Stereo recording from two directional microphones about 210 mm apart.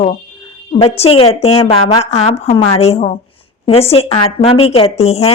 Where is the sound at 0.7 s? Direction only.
25° left (ahead or behind).